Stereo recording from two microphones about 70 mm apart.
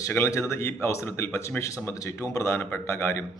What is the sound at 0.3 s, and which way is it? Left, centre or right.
Speech, left.